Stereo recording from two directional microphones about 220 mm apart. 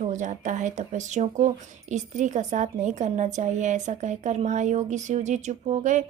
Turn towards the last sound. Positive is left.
turn(degrees=-35)  # may be behind; listen again after turning